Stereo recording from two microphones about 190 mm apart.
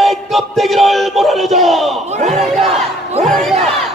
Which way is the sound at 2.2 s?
35° right (ahead or behind).